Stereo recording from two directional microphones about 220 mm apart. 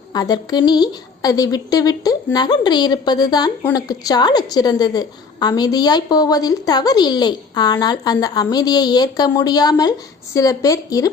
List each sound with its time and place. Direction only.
0.1 s a woman's voice: 15° left (ahead or behind)